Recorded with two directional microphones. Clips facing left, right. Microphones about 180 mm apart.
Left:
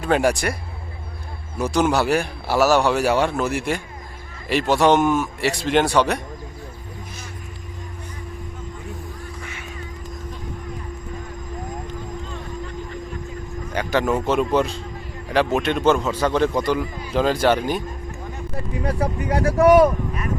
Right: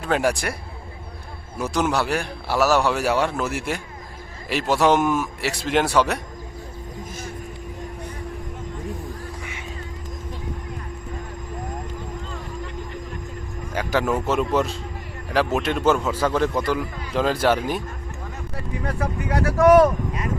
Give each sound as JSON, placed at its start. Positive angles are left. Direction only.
{"t": 0.0, "sound": "a man's voice", "side_deg": 0}
{"t": 1.5, "sound": "a man's voice", "side_deg": 0}
{"t": 9.4, "sound": "music", "side_deg": -15}
{"t": 13.7, "sound": "a man's voice", "side_deg": -5}
{"t": 18.9, "sound": "speech", "side_deg": 30}